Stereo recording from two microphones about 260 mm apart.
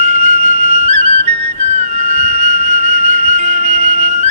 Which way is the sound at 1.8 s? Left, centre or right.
Right.